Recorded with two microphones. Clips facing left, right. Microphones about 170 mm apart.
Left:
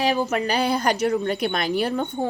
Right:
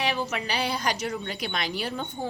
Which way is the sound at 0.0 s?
45° left (ahead or behind).